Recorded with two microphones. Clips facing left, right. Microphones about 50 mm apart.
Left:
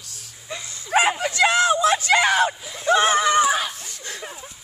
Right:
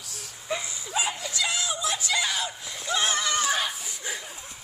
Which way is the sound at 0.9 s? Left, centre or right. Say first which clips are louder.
Left 11 dB; left.